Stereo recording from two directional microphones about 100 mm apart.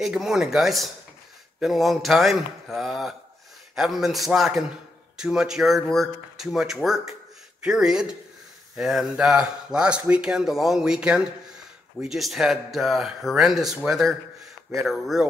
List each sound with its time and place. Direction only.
0.0 s speech: 5° right (ahead or behind)